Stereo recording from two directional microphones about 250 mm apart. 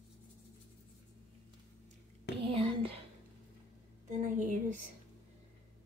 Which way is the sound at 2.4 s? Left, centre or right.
Right.